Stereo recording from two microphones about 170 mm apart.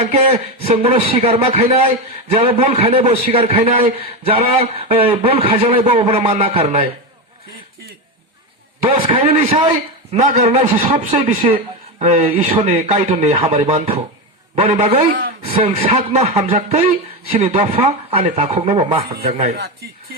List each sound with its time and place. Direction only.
0.1 s a man's voice: 40° right (ahead or behind)
8.8 s a man's voice: 35° right (ahead or behind)
19.5 s speech: 65° right (ahead or behind)